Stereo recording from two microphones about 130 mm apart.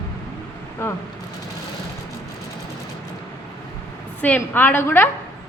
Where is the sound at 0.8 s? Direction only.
20° left (ahead or behind).